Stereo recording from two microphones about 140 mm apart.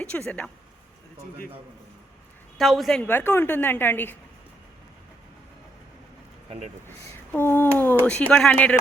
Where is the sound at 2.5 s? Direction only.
Centre (ahead or behind).